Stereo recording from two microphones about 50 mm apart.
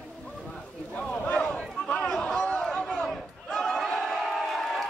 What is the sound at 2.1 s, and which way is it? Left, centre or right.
Crowd, centre.